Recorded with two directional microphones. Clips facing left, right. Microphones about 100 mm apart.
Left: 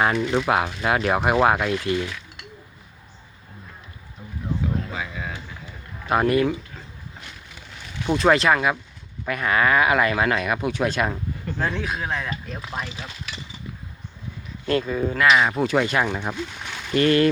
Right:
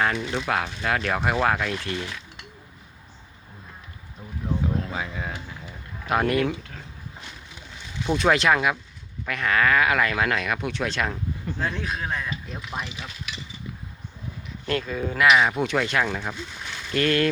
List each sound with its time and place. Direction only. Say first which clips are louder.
0.2 s speech: left 5 dB; 20° left (ahead or behind)
4.9 s a sound: even; 35° right (ahead or behind)
6.1 s speech: left 3 dB; centre (ahead or behind)
8.0 s speech: left 2 dB; 5° left (ahead or behind)
12.6 s speech: left 1 dB; 35° left (ahead or behind)
14.7 s speech: left 4 dB; 10° left (ahead or behind)
15.1 s speech: even; 5° right (ahead or behind)